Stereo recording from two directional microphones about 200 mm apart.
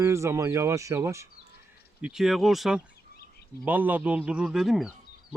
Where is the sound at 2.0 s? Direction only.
5° right (ahead or behind).